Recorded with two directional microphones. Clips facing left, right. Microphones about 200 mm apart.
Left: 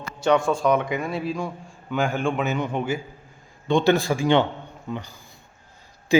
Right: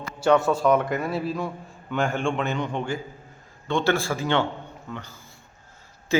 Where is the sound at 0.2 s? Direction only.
5° right (ahead or behind).